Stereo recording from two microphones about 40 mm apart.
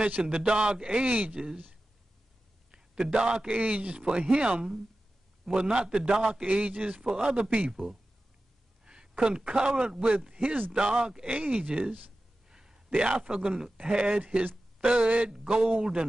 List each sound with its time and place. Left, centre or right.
0.2 s a man's voice: right
2.7 s a man's voice: right
6.6 s a man's voice: right
7.7 s a man's voice: centre
8.8 s a man's voice: right
10.4 s speech: right
10.7 s a man's voice: right
11.2 s a man's voice: right
12.4 s a sound: centre
12.9 s a man's voice: right
15.3 s a man's voice: centre